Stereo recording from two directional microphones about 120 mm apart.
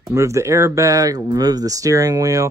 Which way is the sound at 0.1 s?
25° right (ahead or behind).